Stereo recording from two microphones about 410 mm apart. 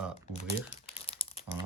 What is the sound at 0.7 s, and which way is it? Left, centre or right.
Crumpling, centre.